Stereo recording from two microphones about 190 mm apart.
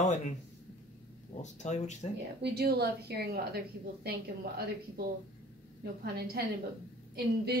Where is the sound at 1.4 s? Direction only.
40° left (ahead or behind).